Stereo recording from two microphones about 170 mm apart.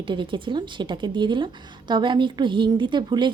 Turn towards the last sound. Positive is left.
turn(degrees=-25)  # may be behind; listen again after turning